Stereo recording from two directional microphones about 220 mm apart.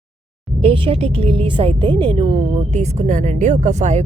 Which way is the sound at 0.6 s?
25° right (ahead or behind).